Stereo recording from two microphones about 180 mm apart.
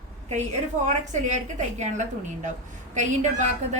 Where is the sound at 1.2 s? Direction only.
40° right (ahead or behind).